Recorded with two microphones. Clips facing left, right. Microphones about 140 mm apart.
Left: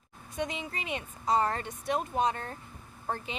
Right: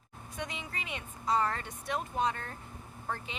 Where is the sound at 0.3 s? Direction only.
20° left (ahead or behind).